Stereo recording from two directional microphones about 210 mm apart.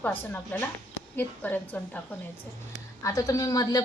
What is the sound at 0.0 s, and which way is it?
Speech, 10° left (ahead or behind).